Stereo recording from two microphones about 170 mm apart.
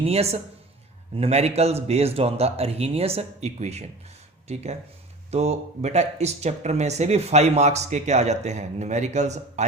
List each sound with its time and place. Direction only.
0.0 s speech: 35° right (ahead or behind)